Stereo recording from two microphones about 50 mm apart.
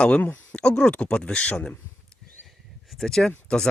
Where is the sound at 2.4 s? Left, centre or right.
Centre.